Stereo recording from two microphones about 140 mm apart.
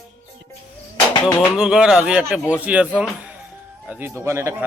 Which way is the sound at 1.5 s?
5° right (ahead or behind).